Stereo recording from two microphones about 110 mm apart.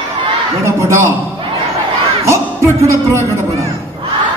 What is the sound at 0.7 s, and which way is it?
Speech, 25° right (ahead or behind).